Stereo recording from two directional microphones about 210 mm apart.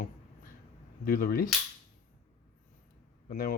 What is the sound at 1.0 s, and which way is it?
Speech, 45° left (ahead or behind).